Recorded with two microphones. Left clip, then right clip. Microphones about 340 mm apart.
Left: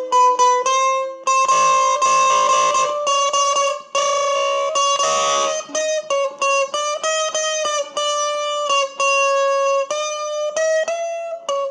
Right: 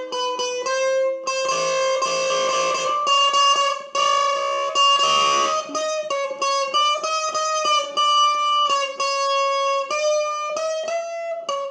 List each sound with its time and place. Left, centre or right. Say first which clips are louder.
0.1 s music: left 12 dB; left